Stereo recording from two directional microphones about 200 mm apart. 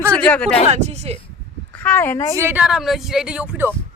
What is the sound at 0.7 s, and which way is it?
Speech, 35° right (ahead or behind).